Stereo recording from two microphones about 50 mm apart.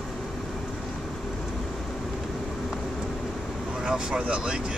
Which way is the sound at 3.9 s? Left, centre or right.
Centre.